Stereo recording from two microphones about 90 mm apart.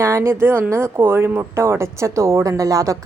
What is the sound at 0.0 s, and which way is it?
Speech, 35° right (ahead or behind).